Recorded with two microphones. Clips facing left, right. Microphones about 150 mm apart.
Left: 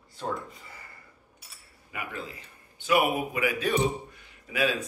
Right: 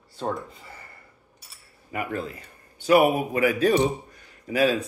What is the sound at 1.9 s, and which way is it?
A man's voice, 50° right (ahead or behind).